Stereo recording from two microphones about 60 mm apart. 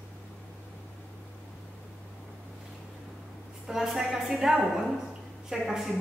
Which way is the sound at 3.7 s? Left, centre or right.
Centre.